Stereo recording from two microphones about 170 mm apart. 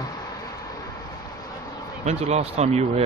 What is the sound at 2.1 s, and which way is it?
Speech, 40° right (ahead or behind).